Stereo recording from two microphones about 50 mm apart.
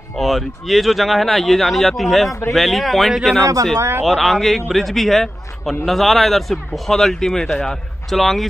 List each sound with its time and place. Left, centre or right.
0.2 s speech: centre
3.7 s speech: right
4.0 s a man's voice: centre
8.2 s speech: centre